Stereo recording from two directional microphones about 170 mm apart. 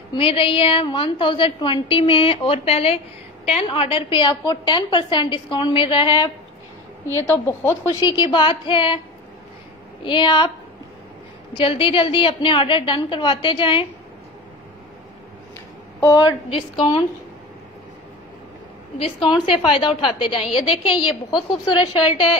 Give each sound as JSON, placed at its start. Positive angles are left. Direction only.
{"t": 0.1, "sound": "a woman's voice", "side_deg": 30}
{"t": 7.4, "sound": "a woman's voice", "side_deg": 15}
{"t": 10.0, "sound": "a woman's voice", "side_deg": 25}
{"t": 11.5, "sound": "a woman's voice", "side_deg": 30}
{"t": 16.0, "sound": "a woman's voice", "side_deg": 25}
{"t": 18.9, "sound": "a woman's voice", "side_deg": 30}